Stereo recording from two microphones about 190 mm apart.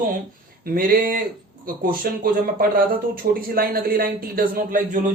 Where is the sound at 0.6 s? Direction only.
50° right (ahead or behind).